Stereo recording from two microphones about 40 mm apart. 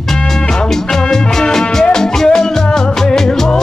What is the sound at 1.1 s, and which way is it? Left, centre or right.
Music, centre.